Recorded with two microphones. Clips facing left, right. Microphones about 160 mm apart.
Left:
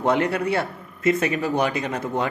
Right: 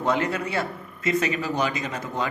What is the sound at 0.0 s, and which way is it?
A man's voice, 60° left (ahead or behind).